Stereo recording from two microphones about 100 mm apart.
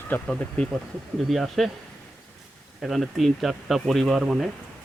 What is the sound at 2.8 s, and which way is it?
Speech, centre (ahead or behind).